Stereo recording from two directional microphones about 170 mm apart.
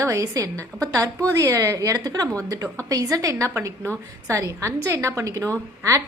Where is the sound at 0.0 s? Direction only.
15° right (ahead or behind).